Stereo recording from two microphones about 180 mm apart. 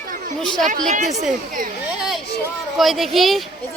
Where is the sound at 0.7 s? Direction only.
45° right (ahead or behind).